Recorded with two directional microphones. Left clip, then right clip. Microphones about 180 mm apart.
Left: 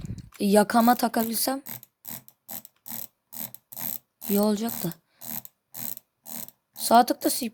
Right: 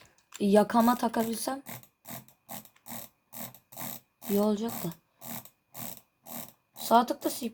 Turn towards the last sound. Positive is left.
turn(degrees=50)  # may be behind; listen again after turning